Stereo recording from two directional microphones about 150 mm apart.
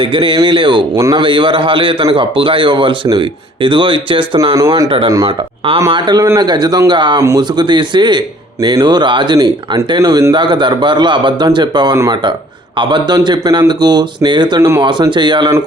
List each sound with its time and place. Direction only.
0.0 s speech: 35° right (ahead or behind)
4.5 s speech: 20° right (ahead or behind)
4.9 s speech: 35° right (ahead or behind)